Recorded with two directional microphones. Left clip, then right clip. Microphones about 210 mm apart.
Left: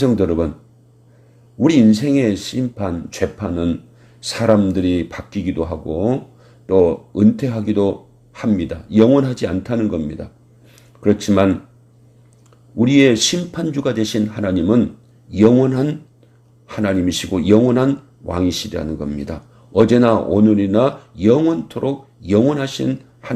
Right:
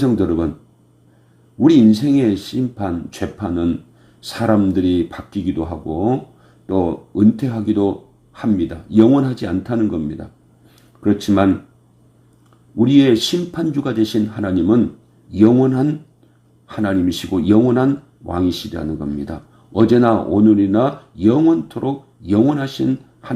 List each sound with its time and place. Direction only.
0.0 s speech: 25° left (ahead or behind)
1.8 s speech: 25° left (ahead or behind)
11.3 s speech: 30° left (ahead or behind)
12.8 s speech: 25° left (ahead or behind)